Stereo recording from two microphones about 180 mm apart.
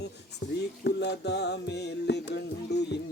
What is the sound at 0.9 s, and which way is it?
Music, 70° left (ahead or behind).